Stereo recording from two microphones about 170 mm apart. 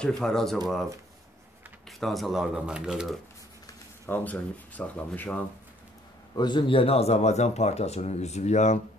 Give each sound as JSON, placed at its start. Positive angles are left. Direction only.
{"t": 0.2, "sound": "speech", "side_deg": 5}
{"t": 1.9, "sound": "speech", "side_deg": 0}
{"t": 3.6, "sound": "speech", "side_deg": 15}
{"t": 6.3, "sound": "speech", "side_deg": 25}